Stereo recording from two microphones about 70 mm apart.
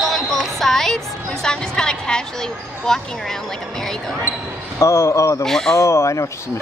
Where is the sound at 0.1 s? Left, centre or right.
Centre.